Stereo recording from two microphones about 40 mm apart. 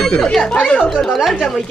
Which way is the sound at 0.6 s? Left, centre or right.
Left.